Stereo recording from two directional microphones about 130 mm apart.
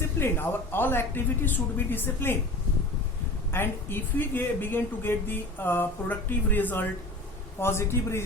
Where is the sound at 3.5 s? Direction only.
15° left (ahead or behind).